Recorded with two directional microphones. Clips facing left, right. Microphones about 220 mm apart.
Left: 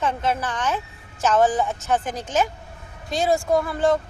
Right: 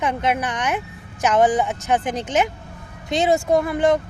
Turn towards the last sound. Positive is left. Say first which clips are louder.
# right 2 dB
turn(degrees=-15)  # may be behind; listen again after turning